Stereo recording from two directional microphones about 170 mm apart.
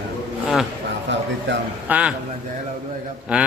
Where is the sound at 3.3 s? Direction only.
5° right (ahead or behind).